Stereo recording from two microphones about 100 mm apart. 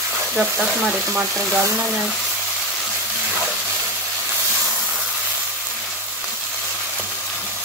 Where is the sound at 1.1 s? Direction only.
20° right (ahead or behind).